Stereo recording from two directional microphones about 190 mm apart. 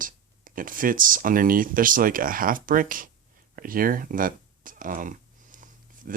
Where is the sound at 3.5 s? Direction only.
45° right (ahead or behind).